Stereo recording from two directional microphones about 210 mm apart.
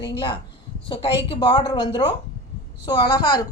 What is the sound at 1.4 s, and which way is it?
A woman's voice, 20° left (ahead or behind).